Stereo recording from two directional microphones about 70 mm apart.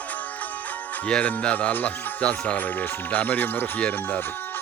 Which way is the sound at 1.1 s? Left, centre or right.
Centre.